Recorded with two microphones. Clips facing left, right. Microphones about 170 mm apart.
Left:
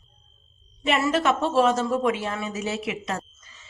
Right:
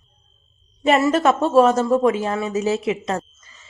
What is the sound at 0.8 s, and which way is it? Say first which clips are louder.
A woman's voice: right 6 dB; 45° right (ahead or behind).